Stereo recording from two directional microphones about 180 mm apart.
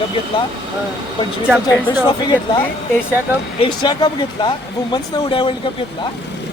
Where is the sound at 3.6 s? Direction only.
25° left (ahead or behind).